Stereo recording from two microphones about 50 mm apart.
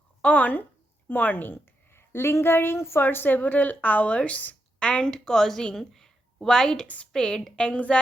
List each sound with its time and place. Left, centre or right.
0.2 s a sound: left
2.0 s a woman's voice: left
4.9 s a woman's voice: centre
6.8 s a woman's voice: left
7.1 s a woman's voice: centre